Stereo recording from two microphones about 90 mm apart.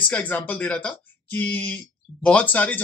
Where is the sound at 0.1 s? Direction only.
20° left (ahead or behind).